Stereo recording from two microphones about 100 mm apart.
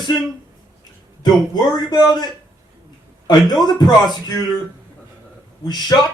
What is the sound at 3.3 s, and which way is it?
A man's voice, 45° left (ahead or behind).